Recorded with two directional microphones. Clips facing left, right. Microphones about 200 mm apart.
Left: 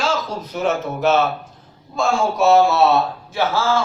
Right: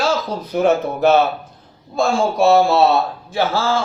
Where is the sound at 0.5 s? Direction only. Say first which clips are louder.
Right 5 dB; 55° right (ahead or behind).